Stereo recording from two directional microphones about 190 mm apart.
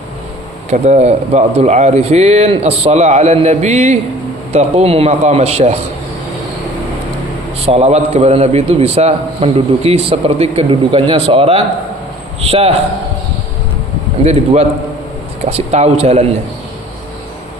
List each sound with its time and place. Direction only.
0.7 s a man's voice: 35° right (ahead or behind)
7.6 s a man's voice: 35° right (ahead or behind)
14.3 s a man's voice: 35° right (ahead or behind)